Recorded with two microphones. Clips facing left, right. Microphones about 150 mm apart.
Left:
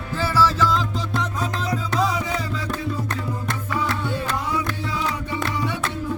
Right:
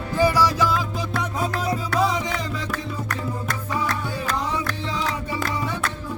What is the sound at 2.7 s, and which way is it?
Music, 25° left (ahead or behind).